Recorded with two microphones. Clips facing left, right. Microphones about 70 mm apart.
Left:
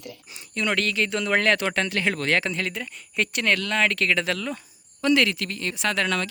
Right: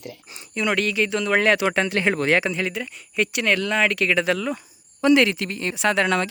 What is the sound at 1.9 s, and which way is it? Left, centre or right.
Speech, right.